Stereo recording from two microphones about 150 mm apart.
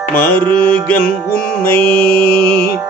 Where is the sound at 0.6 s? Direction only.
10° left (ahead or behind).